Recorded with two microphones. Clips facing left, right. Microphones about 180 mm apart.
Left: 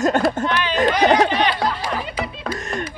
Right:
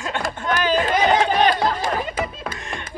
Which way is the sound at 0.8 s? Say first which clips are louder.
Left 5 dB; 40° left (ahead or behind).